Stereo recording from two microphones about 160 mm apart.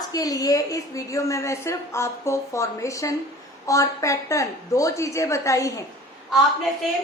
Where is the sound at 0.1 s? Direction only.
25° left (ahead or behind).